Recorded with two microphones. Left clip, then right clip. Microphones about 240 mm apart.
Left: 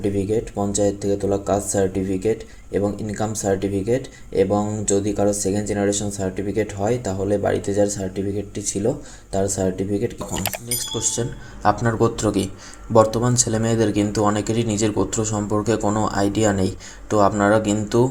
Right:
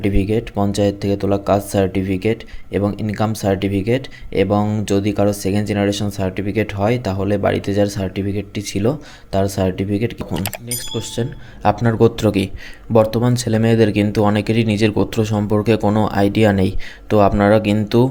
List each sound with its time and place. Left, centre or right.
0.3 s speech: right
0.9 s speech: right
1.7 s speech: right
2.8 s speech: right
3.4 s speech: right
4.7 s speech: right
5.5 s speech: right
5.9 s speech: right
9.6 s speech: right
9.9 s speech: right
10.3 s speech: centre
10.9 s speech: right